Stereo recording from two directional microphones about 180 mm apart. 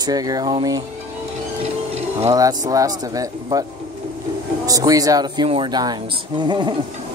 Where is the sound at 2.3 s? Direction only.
20° right (ahead or behind).